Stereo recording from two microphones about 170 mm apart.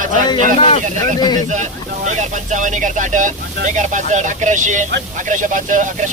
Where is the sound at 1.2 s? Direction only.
25° left (ahead or behind).